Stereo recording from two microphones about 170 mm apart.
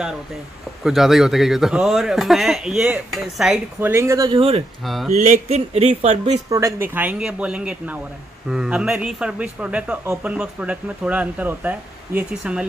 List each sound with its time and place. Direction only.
0.8 s speech: centre (ahead or behind)
3.9 s a man's voice: 15° right (ahead or behind)
4.3 s speech: 35° right (ahead or behind)
4.8 s speech: centre (ahead or behind)
5.2 s speech: 40° right (ahead or behind)
6.5 s a man's voice: 15° right (ahead or behind)